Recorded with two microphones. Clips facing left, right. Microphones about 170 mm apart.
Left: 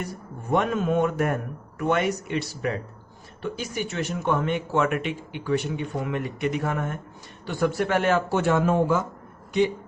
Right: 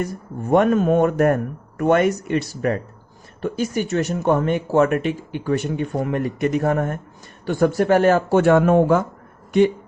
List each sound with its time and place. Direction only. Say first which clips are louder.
0.5 s speech: right 7 dB; 50° right (ahead or behind)